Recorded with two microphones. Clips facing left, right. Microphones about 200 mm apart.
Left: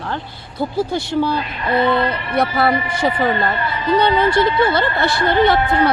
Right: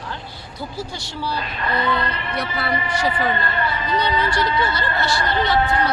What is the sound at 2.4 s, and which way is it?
Speech, 55° left (ahead or behind).